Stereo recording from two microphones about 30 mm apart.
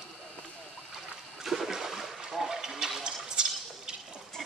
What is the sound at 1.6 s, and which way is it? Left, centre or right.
Boat, centre.